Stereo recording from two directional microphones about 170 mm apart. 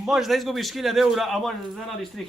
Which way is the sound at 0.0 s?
Centre (ahead or behind).